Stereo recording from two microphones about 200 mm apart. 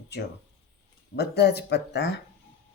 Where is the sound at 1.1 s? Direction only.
55° left (ahead or behind).